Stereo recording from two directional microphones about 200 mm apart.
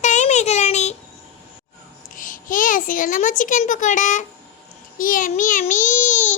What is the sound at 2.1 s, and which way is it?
A child's voice, 40° left (ahead or behind).